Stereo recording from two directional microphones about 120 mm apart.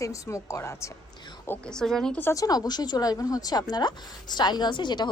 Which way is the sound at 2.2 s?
30° left (ahead or behind).